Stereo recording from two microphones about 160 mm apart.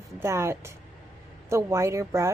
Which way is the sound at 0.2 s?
15° right (ahead or behind).